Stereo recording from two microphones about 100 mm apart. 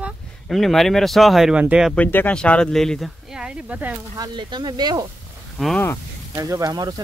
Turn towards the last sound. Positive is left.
turn(degrees=-35)  # may be behind; listen again after turning